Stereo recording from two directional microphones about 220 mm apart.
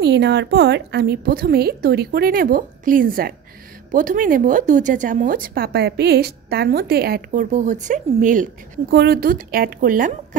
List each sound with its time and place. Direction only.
0.0 s a woman's voice: 50° right (ahead or behind)